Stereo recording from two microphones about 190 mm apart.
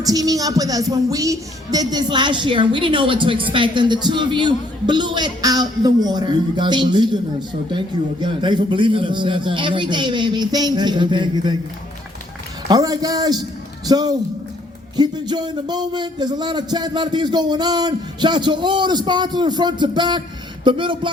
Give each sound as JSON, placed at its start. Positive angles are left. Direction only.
{"t": 0.0, "sound": "speech", "side_deg": -20}
{"t": 8.2, "sound": "speech", "side_deg": -25}
{"t": 12.6, "sound": "speech", "side_deg": -20}